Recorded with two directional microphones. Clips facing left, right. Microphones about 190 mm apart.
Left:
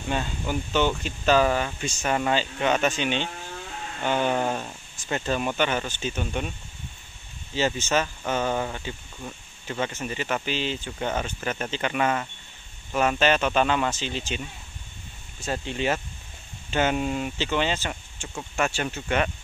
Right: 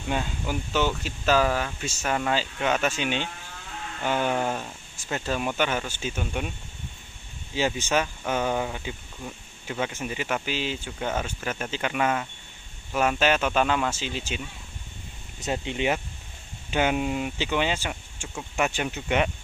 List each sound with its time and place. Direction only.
0.1 s speech: 5° right (ahead or behind)
7.5 s speech: 10° right (ahead or behind)
15.4 s speech: 15° right (ahead or behind)